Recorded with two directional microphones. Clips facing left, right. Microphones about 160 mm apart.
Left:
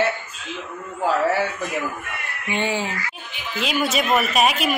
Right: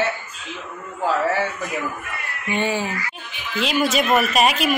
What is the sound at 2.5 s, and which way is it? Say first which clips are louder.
Speech: right 1 dB; 15° left (ahead or behind).